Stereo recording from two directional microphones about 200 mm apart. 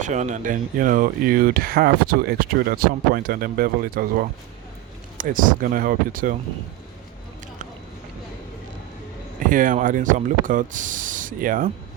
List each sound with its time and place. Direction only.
0.0 s speech: 35° right (ahead or behind)
9.5 s speech: 40° right (ahead or behind)